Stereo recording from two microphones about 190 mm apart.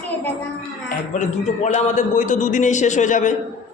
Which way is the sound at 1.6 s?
40° left (ahead or behind).